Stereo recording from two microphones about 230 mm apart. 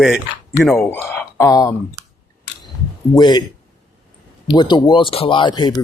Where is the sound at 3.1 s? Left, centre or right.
Centre.